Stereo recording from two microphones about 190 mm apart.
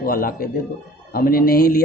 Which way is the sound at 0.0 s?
50° left (ahead or behind).